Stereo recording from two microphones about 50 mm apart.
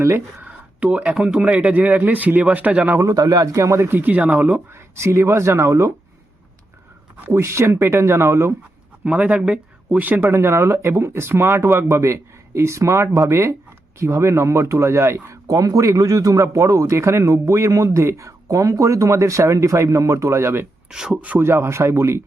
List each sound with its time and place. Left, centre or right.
0.0 s speech: right
0.4 s speech: right
3.0 s speech: right
3.8 s speech: right
4.7 s speech: right
7.3 s speech: right
9.0 s speech: right
10.2 s speech: right
20.9 s speech: centre
21.3 s speech: right